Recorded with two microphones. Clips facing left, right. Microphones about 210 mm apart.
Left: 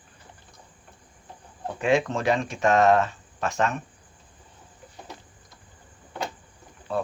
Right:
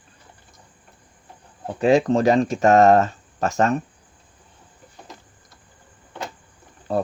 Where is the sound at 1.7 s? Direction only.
35° right (ahead or behind).